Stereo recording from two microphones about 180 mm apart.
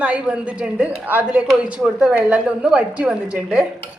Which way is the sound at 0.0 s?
5° right (ahead or behind).